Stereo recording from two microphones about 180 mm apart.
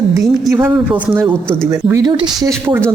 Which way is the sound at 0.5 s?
10° right (ahead or behind).